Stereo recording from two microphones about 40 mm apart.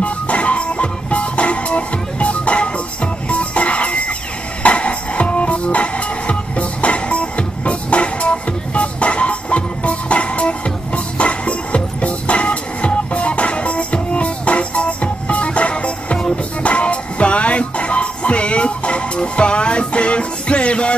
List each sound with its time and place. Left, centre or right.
0.0 s music: left